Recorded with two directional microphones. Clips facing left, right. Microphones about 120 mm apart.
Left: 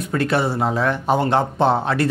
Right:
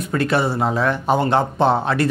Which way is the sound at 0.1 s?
25° right (ahead or behind).